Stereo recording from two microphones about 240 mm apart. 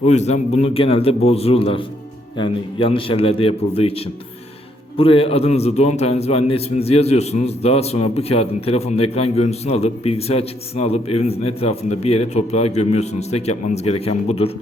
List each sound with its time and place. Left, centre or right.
0.0 s a man's voice: left